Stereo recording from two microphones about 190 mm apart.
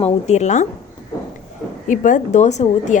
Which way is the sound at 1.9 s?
45° left (ahead or behind).